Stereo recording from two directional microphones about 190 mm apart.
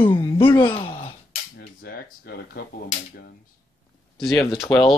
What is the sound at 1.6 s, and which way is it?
Speech, 55° left (ahead or behind).